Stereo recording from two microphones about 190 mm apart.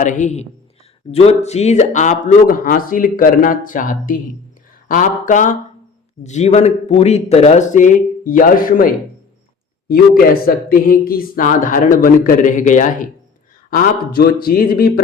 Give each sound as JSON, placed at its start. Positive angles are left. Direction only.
{"t": 0.0, "sound": "a man's voice", "side_deg": 40}
{"t": 9.9, "sound": "speech", "side_deg": 50}